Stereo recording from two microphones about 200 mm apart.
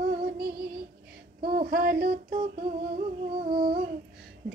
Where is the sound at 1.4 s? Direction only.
50° right (ahead or behind).